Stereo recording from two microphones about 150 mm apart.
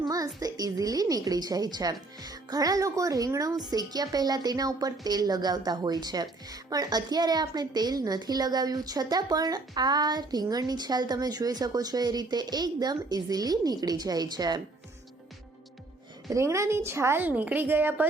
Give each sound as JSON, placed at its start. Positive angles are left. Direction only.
{"t": 0.0, "sound": "a woman's voice", "side_deg": -25}
{"t": 16.3, "sound": "a woman's voice", "side_deg": -20}